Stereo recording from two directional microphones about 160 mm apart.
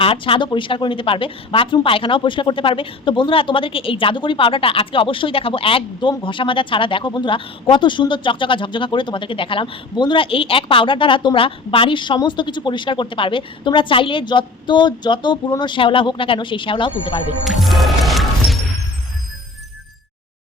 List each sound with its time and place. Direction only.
0.0 s a woman's voice: 35° left (ahead or behind)
17.4 s music: centre (ahead or behind)